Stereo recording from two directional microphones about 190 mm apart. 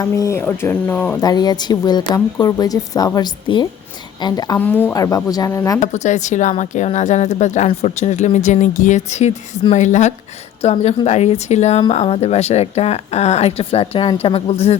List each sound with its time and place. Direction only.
0.0 s speech: 15° left (ahead or behind)
1.2 s a woman's voice: 20° left (ahead or behind)
4.6 s speech: 10° left (ahead or behind)
5.8 s a woman's voice: 40° left (ahead or behind)